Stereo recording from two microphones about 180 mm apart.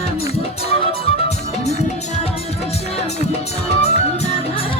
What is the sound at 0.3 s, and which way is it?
Music, 35° left (ahead or behind).